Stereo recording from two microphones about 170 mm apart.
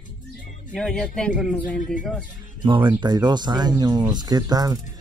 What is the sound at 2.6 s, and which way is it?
Speech, 25° right (ahead or behind).